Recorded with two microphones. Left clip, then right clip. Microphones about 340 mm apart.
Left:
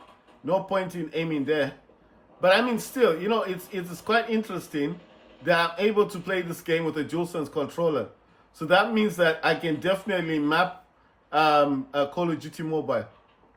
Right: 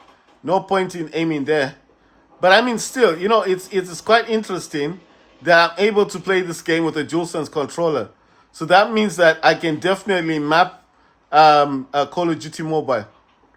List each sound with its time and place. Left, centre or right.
0.4 s speech: right